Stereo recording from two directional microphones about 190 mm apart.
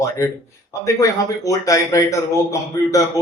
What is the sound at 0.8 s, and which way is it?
A man's voice, 15° left (ahead or behind).